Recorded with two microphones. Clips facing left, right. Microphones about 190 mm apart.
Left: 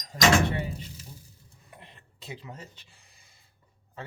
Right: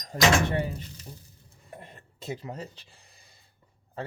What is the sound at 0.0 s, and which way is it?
Speech, 45° right (ahead or behind).